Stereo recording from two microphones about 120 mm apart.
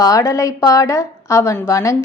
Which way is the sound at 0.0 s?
30° left (ahead or behind).